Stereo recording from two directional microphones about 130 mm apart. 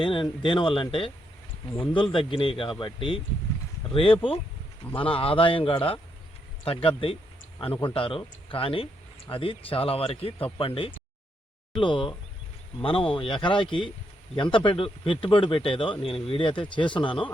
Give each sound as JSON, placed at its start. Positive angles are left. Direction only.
{"t": 0.0, "sound": "speech", "side_deg": 40}